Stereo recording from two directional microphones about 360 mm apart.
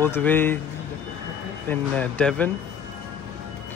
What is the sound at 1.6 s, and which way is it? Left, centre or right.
Speech, centre.